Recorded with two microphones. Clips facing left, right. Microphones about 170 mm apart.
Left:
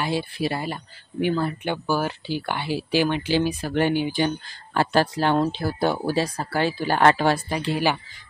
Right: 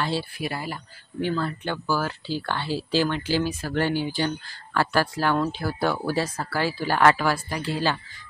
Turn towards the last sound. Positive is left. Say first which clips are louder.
# left 3 dB
turn(degrees=15)  # may be behind; listen again after turning